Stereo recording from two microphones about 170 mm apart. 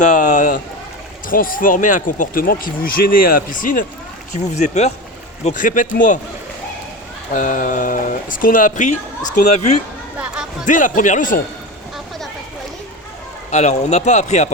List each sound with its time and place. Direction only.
0.0 s a sound: 50° left (ahead or behind)
1.3 s speech: 55° left (ahead or behind)
7.3 s speech: 50° left (ahead or behind)
10.2 s a sound: 5° right (ahead or behind)
10.7 s speech: 50° left (ahead or behind)
13.5 s speech: 40° left (ahead or behind)